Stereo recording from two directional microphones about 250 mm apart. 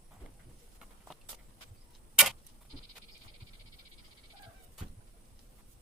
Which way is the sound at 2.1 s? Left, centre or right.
Centre.